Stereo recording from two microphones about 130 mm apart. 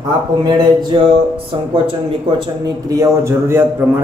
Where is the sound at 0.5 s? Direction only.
35° right (ahead or behind).